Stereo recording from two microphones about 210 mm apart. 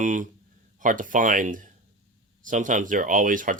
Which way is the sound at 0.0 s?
35° right (ahead or behind).